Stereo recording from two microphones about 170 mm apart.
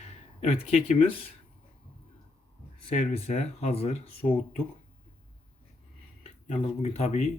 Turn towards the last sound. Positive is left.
turn(degrees=40)  # may be behind; listen again after turning